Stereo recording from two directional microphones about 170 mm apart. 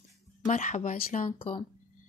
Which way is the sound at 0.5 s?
45° left (ahead or behind).